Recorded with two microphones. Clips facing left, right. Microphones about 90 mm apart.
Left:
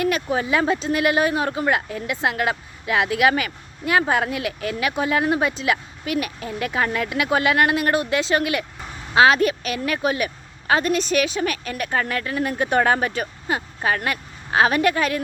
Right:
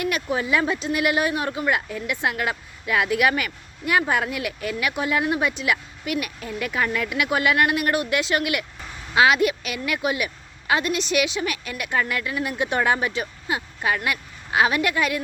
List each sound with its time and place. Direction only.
0.0 s a woman's voice: 30° left (ahead or behind)